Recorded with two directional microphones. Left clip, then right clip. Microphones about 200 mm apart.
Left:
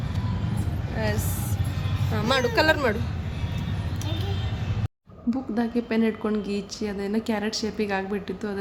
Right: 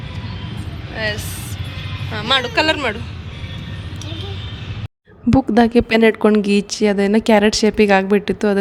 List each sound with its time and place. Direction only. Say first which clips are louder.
0.9 s speech: right 7 dB; 5° right (ahead or behind)
5.3 s a woman's voice: right 14 dB; 50° right (ahead or behind)